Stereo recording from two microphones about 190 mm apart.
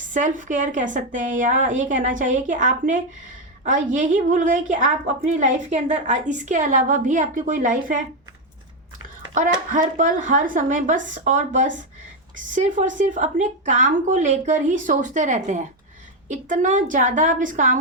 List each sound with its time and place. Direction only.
0.1 s a woman's voice: 40° right (ahead or behind)
9.3 s a woman's voice: 45° right (ahead or behind)